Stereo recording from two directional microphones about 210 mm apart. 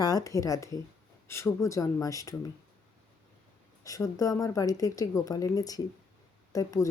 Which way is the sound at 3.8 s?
15° left (ahead or behind).